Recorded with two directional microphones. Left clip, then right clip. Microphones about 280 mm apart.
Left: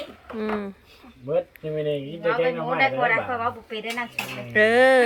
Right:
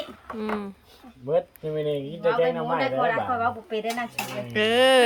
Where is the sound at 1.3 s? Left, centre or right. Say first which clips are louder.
Even; right.